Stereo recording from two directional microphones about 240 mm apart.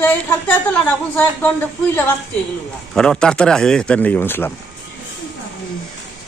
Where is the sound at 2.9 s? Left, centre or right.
Centre.